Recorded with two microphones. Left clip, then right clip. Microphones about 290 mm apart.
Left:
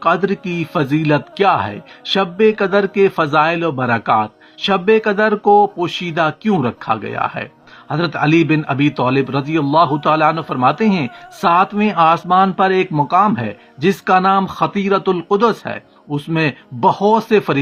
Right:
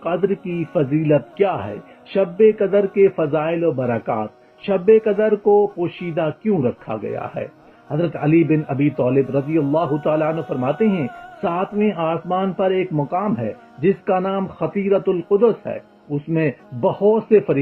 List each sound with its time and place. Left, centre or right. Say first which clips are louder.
0.0 s a man's voice: left 5 dB; left